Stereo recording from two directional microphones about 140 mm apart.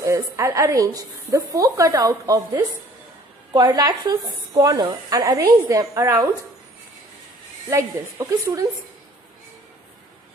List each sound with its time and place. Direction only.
0.0 s a woman's voice: 20° right (ahead or behind)
7.7 s a woman's voice: 25° right (ahead or behind)